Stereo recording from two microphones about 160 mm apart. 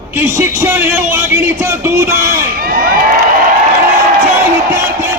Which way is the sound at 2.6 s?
70° right (ahead or behind).